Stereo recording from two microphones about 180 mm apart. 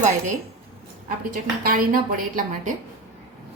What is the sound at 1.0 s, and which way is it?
A woman's voice, 50° right (ahead or behind).